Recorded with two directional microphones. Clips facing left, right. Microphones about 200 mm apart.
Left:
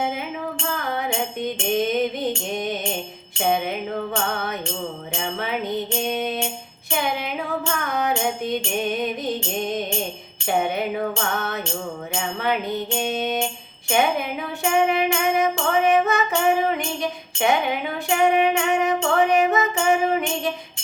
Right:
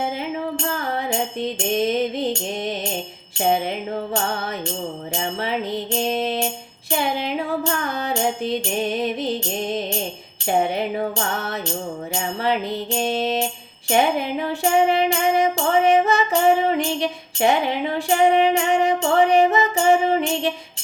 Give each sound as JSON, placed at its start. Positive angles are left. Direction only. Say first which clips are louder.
{"t": 1.4, "sound": "music", "louder": "even", "side_deg": -30}